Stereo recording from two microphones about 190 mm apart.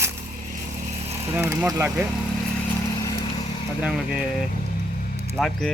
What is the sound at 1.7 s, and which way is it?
Speech, 10° right (ahead or behind).